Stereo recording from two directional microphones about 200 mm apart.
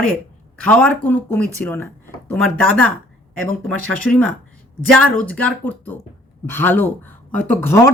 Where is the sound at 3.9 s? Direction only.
5° left (ahead or behind).